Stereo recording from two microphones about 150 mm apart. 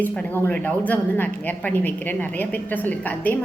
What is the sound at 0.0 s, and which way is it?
Speech, 10° left (ahead or behind).